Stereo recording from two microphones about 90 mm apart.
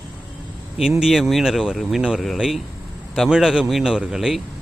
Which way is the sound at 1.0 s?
5° right (ahead or behind).